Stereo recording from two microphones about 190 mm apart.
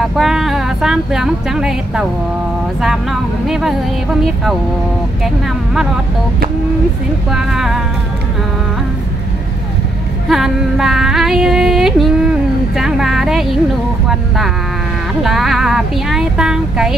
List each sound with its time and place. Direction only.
0.0 s a woman's voice: centre (ahead or behind)
2.8 s female singing: centre (ahead or behind)
7.2 s female singing: centre (ahead or behind)
10.2 s female singing: centre (ahead or behind)